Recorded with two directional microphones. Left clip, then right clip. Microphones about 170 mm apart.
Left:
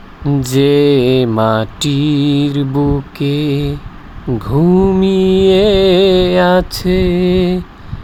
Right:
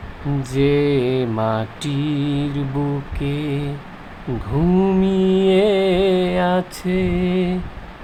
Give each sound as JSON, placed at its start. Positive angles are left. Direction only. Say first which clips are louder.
{"t": 0.4, "sound": "mantra", "louder": "left 7 dB", "side_deg": 45}
{"t": 4.7, "sound": "mantra", "louder": "left 6 dB", "side_deg": 20}
{"t": 4.9, "sound": "mantra", "louder": "left 6 dB", "side_deg": 35}